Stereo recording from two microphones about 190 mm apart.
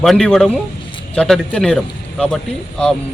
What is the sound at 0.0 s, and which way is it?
Speech, 5° left (ahead or behind).